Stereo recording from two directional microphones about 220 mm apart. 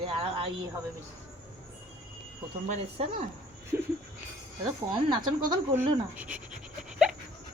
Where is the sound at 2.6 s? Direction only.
35° right (ahead or behind).